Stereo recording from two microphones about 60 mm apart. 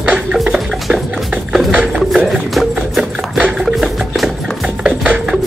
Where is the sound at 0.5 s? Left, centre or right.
Centre.